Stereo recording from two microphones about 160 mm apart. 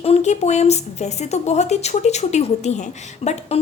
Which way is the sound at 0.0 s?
40° left (ahead or behind).